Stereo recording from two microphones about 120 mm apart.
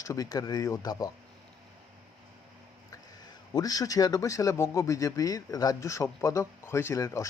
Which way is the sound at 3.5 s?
30° left (ahead or behind).